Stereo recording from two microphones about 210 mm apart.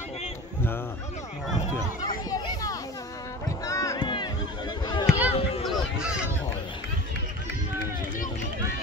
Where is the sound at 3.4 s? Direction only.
15° left (ahead or behind).